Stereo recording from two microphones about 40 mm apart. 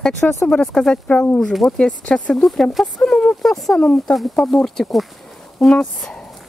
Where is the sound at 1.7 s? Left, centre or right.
Centre.